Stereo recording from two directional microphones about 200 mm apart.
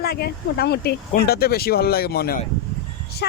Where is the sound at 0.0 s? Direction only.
50° left (ahead or behind).